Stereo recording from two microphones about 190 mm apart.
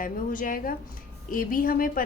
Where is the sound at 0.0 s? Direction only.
45° left (ahead or behind).